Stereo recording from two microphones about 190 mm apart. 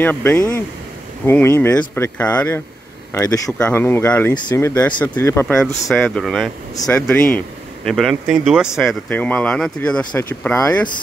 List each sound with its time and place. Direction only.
0.0 s speech: 10° left (ahead or behind)
5.9 s speech: centre (ahead or behind)